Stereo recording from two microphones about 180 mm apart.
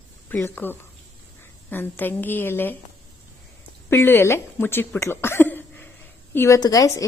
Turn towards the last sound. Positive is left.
turn(degrees=20)  # may be behind; listen again after turning